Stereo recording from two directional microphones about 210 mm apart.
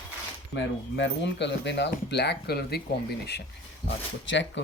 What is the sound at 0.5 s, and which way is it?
Speech, 60° left (ahead or behind).